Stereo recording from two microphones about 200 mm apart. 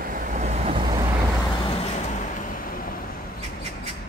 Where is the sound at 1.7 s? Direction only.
40° left (ahead or behind).